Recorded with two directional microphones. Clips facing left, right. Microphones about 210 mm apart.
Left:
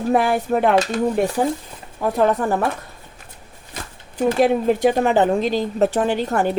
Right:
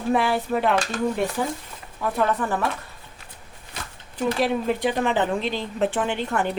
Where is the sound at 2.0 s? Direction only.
40° left (ahead or behind).